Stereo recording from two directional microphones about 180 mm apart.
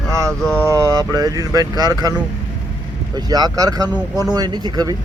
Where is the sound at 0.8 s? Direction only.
20° right (ahead or behind).